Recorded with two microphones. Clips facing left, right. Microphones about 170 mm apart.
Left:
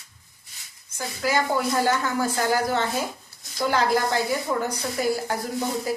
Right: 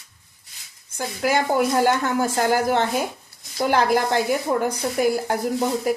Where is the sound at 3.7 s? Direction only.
60° right (ahead or behind).